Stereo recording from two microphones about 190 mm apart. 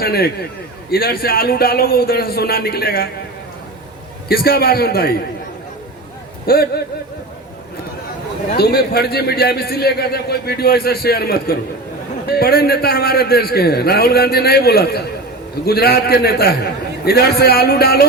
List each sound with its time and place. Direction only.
0.0 s a man's voice: 55° left (ahead or behind)
4.3 s a man's voice: 55° left (ahead or behind)
6.4 s a man's voice: 55° left (ahead or behind)
8.5 s a man's voice: 55° left (ahead or behind)